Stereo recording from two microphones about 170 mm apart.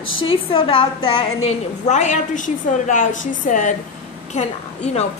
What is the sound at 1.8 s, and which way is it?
A woman's voice, 45° left (ahead or behind).